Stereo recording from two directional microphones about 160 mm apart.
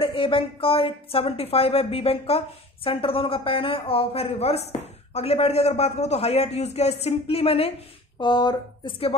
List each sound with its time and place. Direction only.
0.0 s a woman's voice: 35° left (ahead or behind)
8.2 s speech: 30° left (ahead or behind)